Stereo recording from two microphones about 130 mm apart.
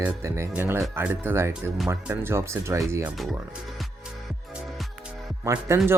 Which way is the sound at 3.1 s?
Centre (ahead or behind).